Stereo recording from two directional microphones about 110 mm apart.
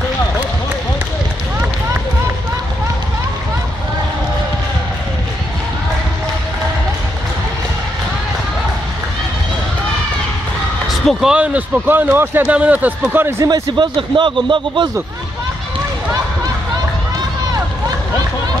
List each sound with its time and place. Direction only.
11.1 s speech: 5° right (ahead or behind); by 13.5 s 20° right (ahead or behind)
13.5 s speech: 45° right (ahead or behind)